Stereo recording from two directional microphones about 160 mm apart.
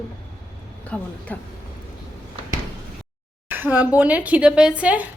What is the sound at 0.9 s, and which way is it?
Speech, 10° left (ahead or behind).